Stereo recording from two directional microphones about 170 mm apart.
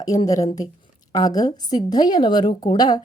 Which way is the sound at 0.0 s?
20° left (ahead or behind).